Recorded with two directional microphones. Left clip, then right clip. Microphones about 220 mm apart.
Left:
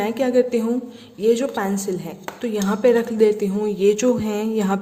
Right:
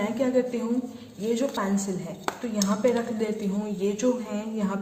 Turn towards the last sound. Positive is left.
turn(degrees=50)  # may be behind; listen again after turning